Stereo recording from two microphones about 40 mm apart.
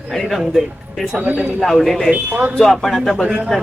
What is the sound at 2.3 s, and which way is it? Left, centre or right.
Speech, right.